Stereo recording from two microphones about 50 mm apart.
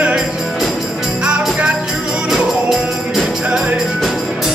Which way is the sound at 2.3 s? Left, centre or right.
Centre.